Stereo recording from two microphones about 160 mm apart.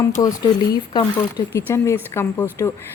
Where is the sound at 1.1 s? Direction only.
15° left (ahead or behind).